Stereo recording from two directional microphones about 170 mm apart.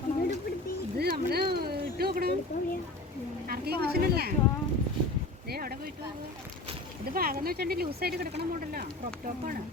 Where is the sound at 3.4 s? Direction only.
65° right (ahead or behind).